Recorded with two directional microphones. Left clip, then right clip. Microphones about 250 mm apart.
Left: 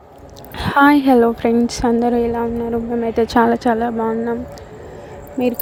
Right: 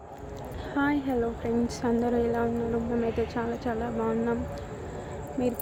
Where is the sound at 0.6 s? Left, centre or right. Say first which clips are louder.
Left 16 dB; left.